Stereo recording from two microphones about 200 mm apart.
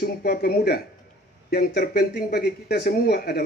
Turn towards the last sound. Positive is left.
turn(degrees=55)  # may be behind; listen again after turning